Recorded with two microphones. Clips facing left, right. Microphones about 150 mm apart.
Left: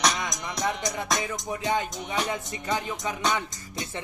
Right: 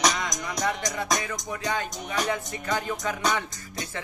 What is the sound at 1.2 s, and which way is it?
Speech, 20° left (ahead or behind).